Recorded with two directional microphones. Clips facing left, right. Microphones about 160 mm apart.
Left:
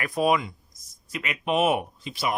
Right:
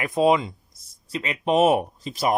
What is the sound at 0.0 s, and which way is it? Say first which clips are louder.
Speech: right 4 dB; 25° right (ahead or behind).